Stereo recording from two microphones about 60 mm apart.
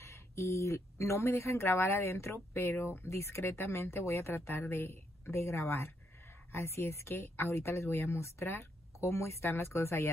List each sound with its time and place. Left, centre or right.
0.0 s speech: left